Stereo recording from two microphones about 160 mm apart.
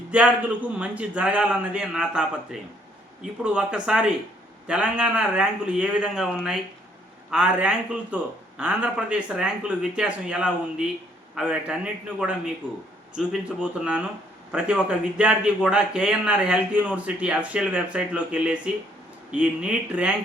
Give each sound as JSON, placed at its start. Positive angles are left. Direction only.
{"t": 0.1, "sound": "a man's voice", "side_deg": -10}